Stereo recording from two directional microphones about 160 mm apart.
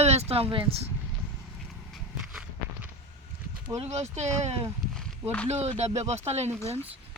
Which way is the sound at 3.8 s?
45° right (ahead or behind).